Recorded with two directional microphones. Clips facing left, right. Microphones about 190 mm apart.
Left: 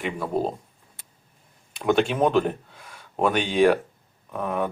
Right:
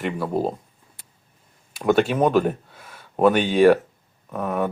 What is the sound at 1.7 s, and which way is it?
Speech, centre (ahead or behind).